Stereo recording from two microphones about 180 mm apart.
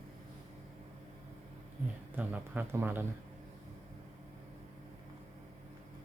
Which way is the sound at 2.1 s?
10° right (ahead or behind).